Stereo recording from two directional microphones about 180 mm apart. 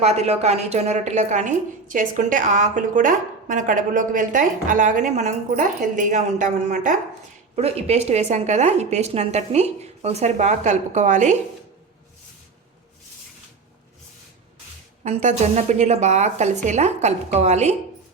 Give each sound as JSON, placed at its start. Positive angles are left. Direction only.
{"t": 0.0, "sound": "a woman's voice", "side_deg": -35}
{"t": 7.5, "sound": "a woman's voice", "side_deg": -35}
{"t": 15.0, "sound": "a woman's voice", "side_deg": -40}